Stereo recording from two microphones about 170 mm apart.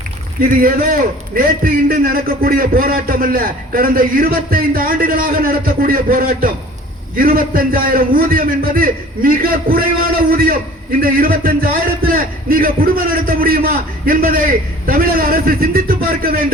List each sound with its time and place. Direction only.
0.3 s a man's voice: 55° right (ahead or behind)